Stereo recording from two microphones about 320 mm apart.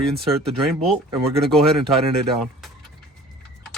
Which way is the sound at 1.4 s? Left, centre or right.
Centre.